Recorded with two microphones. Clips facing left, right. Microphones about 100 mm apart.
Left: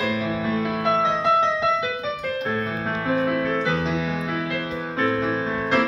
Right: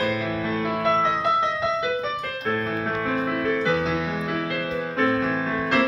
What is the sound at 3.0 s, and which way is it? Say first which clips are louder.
Music: left 4 dB; 10° left (ahead or behind).